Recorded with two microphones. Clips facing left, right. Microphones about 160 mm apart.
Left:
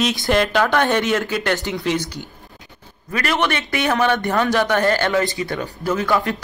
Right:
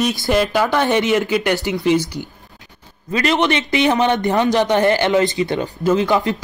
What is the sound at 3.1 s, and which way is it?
A man's voice, 20° right (ahead or behind).